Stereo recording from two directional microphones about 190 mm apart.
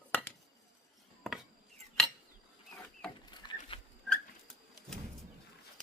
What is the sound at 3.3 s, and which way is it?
Rowboat, 25° left (ahead or behind).